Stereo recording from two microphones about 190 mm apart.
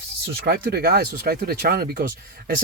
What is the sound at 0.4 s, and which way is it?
Speech, 55° right (ahead or behind).